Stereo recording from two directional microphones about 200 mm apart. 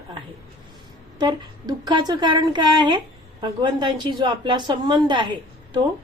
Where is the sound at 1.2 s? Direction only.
20° right (ahead or behind).